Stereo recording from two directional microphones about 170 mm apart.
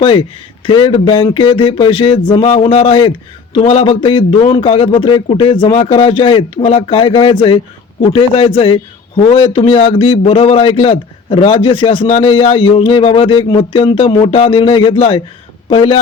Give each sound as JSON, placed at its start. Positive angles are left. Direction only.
{"t": 0.0, "sound": "a man's voice", "side_deg": 30}